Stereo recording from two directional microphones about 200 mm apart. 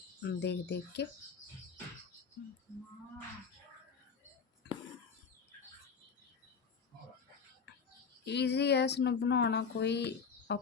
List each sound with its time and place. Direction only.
0.3 s speech: 60° left (ahead or behind)
8.2 s speech: 60° left (ahead or behind)